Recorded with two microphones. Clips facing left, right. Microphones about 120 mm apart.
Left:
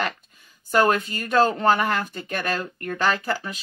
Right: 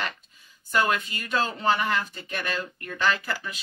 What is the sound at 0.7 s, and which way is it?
Speech, 40° left (ahead or behind).